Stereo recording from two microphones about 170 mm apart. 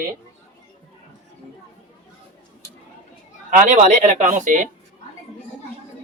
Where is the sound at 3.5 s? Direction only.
50° right (ahead or behind).